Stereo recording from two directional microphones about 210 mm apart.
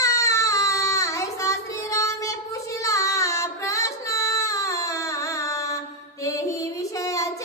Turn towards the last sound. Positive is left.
turn(degrees=15)  # may be behind; listen again after turning